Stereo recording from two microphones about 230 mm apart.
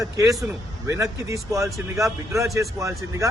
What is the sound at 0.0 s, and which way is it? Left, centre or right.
A man's voice, centre.